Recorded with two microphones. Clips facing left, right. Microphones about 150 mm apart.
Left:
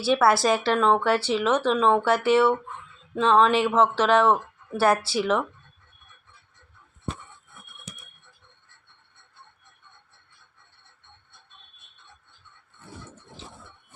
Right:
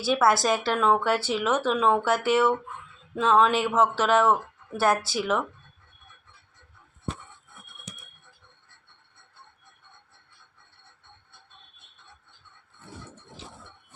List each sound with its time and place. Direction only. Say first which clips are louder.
0.0 s speech: left 2 dB; centre (ahead or behind)